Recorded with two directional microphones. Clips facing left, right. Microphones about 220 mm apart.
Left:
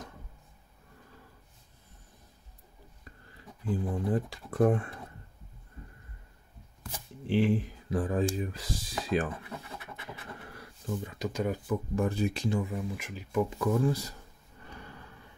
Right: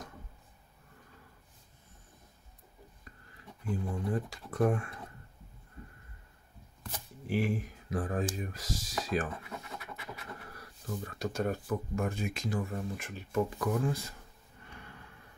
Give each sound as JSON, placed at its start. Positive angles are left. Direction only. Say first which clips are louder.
{"t": 3.6, "sound": "speech", "louder": "left 4 dB", "side_deg": 35}
{"t": 7.2, "sound": "speech", "louder": "left 5 dB", "side_deg": 30}
{"t": 10.5, "sound": "a sound", "louder": "left 5 dB", "side_deg": 25}
{"t": 11.1, "sound": "speech", "louder": "even", "side_deg": 15}
{"t": 11.9, "sound": "speech", "louder": "left 5 dB", "side_deg": 35}
{"t": 12.6, "sound": "speech", "louder": "left 2 dB", "side_deg": 10}
{"t": 13.5, "sound": "speech", "louder": "left 4 dB", "side_deg": 30}